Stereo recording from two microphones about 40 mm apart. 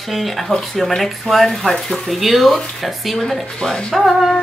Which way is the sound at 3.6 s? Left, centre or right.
Centre.